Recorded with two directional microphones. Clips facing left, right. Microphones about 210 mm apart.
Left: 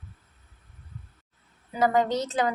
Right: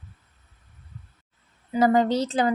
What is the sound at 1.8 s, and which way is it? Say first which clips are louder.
Speech: right 3 dB; 30° right (ahead or behind).